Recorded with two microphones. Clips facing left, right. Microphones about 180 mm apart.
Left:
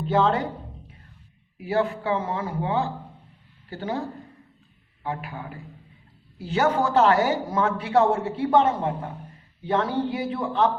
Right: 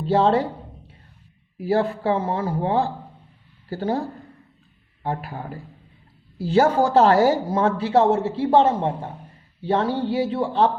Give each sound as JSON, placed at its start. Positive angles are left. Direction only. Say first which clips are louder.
{"t": 0.0, "sound": "speech", "louder": "right 3 dB", "side_deg": -30}
{"t": 1.5, "sound": "speech", "louder": "right 3 dB", "side_deg": -35}
{"t": 5.0, "sound": "speech", "louder": "right 3 dB", "side_deg": -40}